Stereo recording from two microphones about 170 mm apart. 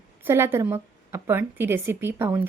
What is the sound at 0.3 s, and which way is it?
A woman's voice, 15° right (ahead or behind).